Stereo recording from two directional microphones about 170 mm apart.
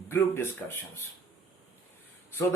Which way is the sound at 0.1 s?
15° left (ahead or behind).